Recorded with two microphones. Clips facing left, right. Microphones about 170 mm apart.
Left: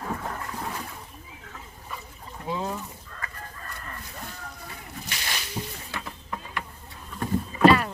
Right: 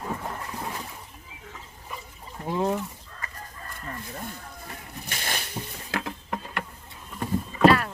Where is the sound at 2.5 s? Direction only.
60° right (ahead or behind).